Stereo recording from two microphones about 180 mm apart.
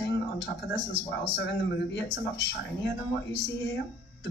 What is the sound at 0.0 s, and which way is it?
Speech, 70° left (ahead or behind).